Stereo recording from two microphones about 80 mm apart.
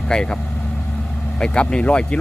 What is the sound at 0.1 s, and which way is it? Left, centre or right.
Speech, centre.